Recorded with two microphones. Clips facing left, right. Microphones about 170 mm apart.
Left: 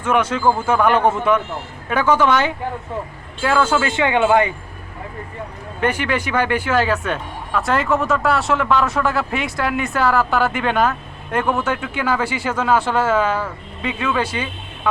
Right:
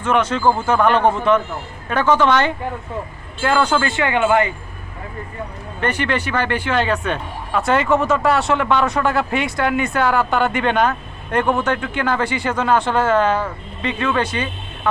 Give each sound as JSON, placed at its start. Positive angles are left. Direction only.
{"t": 0.0, "sound": "speech", "side_deg": 10}
{"t": 3.8, "sound": "speech", "side_deg": 20}
{"t": 5.8, "sound": "speech", "side_deg": 10}